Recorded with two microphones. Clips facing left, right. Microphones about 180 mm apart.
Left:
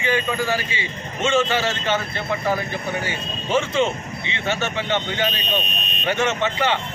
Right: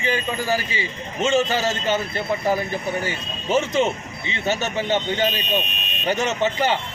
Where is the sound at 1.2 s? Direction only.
35° right (ahead or behind).